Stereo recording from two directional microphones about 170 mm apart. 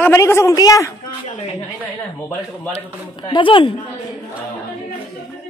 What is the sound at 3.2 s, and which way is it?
Speech, 30° left (ahead or behind).